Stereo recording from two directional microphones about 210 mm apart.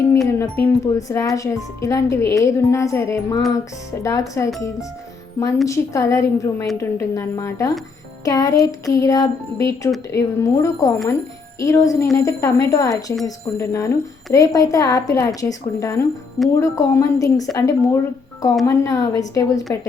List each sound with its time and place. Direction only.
0.3 s speech: 10° left (ahead or behind)